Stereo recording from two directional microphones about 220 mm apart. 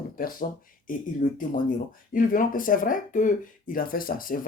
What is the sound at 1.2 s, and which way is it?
Speech, 35° left (ahead or behind).